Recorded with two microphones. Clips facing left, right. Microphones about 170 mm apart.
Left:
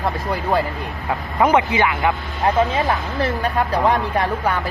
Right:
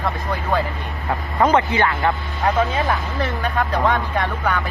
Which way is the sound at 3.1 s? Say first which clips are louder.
Left 2 dB; 30° left (ahead or behind).